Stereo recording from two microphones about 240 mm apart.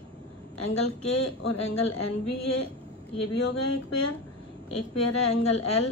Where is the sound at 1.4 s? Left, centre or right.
Left.